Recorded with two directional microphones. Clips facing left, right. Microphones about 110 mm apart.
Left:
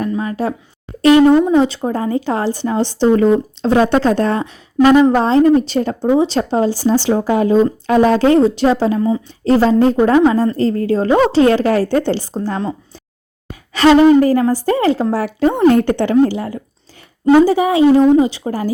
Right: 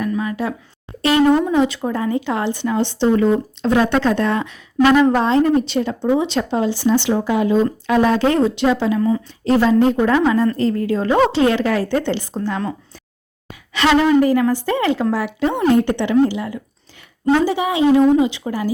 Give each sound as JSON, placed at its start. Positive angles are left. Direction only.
{"t": 0.0, "sound": "a sound", "side_deg": 35}
{"t": 1.5, "sound": "speech", "side_deg": 30}
{"t": 9.0, "sound": "a woman's voice", "side_deg": 20}
{"t": 9.4, "sound": "speech", "side_deg": 35}
{"t": 13.7, "sound": "speech", "side_deg": 40}